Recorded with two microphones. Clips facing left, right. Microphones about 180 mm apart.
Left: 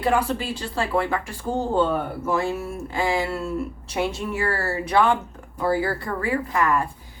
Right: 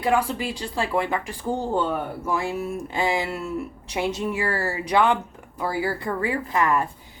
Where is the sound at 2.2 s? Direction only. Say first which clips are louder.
Left 1 dB; 15° right (ahead or behind).